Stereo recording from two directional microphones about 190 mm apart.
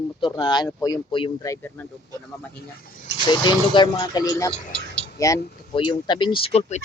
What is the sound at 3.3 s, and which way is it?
Speech, 25° left (ahead or behind).